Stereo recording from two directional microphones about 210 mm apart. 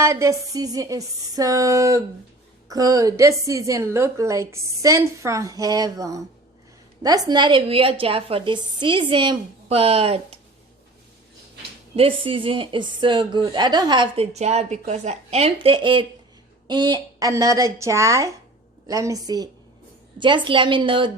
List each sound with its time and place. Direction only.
0.0 s a woman's voice: 15° right (ahead or behind)
11.9 s a woman's voice: 25° right (ahead or behind)